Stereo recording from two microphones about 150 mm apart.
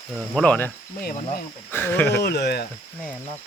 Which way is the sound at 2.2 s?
90° left.